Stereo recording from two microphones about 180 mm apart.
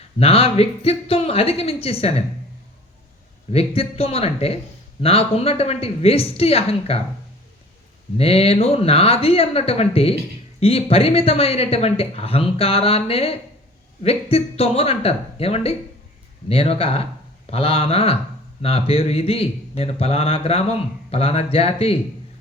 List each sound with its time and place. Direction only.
0.2 s speech: 35° left (ahead or behind)
3.5 s speech: 35° left (ahead or behind)
8.2 s speech: 35° left (ahead or behind)